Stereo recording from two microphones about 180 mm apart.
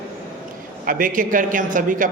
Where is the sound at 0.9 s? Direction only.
50° right (ahead or behind).